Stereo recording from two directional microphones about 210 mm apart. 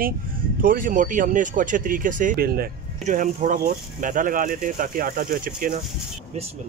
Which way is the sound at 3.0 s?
35° right (ahead or behind).